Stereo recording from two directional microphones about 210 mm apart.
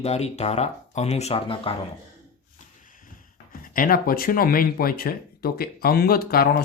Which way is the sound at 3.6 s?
40° left (ahead or behind).